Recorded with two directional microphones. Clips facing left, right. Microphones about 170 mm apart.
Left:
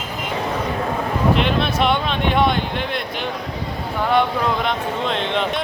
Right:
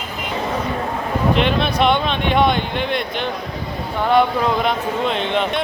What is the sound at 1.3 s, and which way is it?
Speech, centre (ahead or behind).